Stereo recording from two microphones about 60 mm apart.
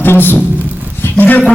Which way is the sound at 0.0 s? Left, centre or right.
Left.